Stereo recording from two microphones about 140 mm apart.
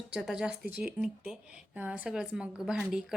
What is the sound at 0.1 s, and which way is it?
A woman's voice, 5° right (ahead or behind).